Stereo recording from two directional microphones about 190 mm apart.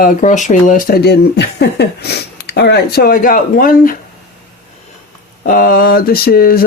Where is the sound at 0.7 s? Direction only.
45° left (ahead or behind).